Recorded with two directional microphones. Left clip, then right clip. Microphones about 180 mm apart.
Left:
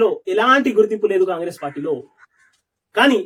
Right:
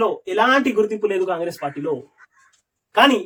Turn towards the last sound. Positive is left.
turn(degrees=-5)  # may be behind; listen again after turning